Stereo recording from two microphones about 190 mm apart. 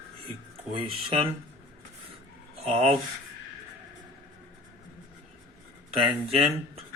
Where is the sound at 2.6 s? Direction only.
30° right (ahead or behind).